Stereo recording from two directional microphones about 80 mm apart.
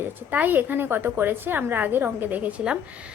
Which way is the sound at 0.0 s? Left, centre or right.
Right.